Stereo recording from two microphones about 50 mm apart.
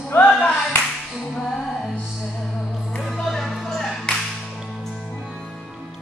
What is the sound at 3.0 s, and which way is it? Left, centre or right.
Music, centre.